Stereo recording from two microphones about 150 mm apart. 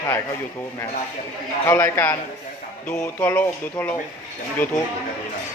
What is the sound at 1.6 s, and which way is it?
Speech, 15° left (ahead or behind).